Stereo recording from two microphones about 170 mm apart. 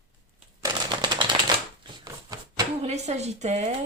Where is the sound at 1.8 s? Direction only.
20° right (ahead or behind).